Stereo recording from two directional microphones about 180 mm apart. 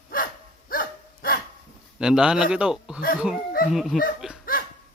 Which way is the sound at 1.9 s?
5° right (ahead or behind).